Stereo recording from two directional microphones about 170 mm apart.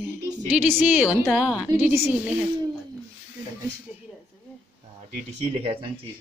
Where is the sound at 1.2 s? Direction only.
Centre (ahead or behind).